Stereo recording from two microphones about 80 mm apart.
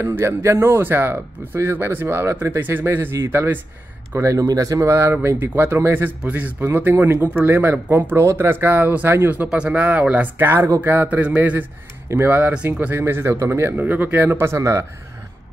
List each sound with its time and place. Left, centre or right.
0.0 s a man's voice: right
9.5 s speech: centre
12.1 s speech: right
13.0 s a man's voice: right